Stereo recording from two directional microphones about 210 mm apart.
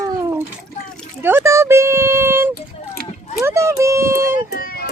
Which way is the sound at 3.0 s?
45° right (ahead or behind).